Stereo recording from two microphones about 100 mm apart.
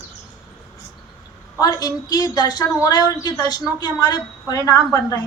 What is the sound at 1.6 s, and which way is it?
A woman's voice, 40° left (ahead or behind).